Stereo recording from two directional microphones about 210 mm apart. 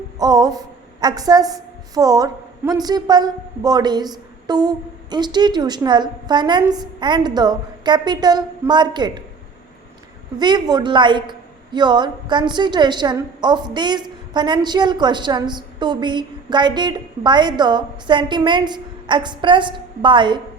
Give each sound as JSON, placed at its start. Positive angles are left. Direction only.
{"t": 0.2, "sound": "a sound", "side_deg": -20}
{"t": 1.0, "sound": "a woman's voice", "side_deg": -20}
{"t": 10.3, "sound": "a woman's voice", "side_deg": -20}